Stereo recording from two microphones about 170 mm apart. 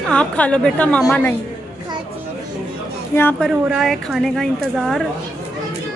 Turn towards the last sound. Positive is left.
turn(degrees=0)  # may be behind; listen again after turning